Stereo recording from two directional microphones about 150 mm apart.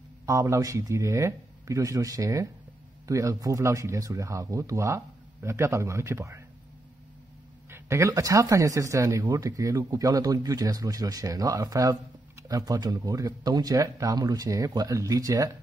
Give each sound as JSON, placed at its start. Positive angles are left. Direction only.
{"t": 0.3, "sound": "speech", "side_deg": -20}
{"t": 7.7, "sound": "speech", "side_deg": -20}